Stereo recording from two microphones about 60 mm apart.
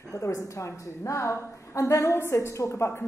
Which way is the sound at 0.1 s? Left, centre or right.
Left.